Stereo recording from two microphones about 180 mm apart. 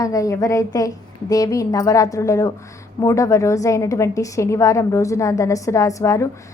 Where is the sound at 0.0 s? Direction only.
20° left (ahead or behind).